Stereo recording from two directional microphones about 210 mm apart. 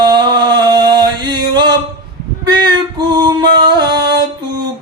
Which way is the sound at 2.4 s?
20° right (ahead or behind).